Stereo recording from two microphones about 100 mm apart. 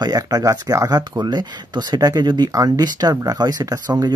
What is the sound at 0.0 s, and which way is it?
Speech, 40° right (ahead or behind).